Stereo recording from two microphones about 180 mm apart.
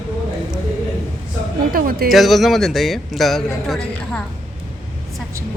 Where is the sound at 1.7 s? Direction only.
50° right (ahead or behind).